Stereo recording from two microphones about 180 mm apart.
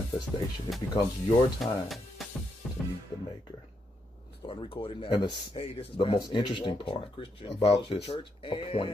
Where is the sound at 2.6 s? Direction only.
Centre (ahead or behind).